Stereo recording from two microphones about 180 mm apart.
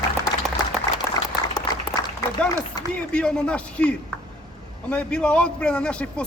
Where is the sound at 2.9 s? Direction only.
5° left (ahead or behind).